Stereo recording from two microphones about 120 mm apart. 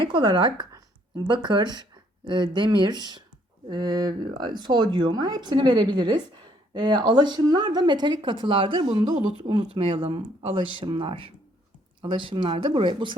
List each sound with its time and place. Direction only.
0.0 s speech: 40° right (ahead or behind)